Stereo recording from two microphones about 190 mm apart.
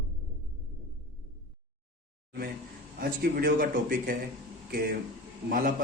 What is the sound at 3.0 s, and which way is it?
A man's voice, 50° right (ahead or behind).